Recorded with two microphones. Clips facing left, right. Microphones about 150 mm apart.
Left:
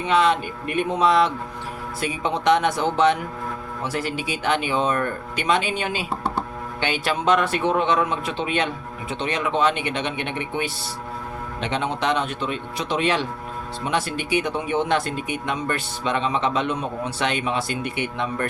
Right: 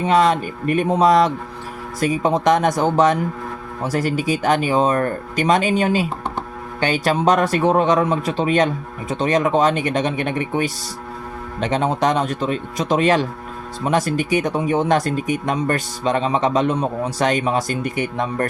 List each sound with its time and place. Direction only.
0.0 s speech: 40° right (ahead or behind)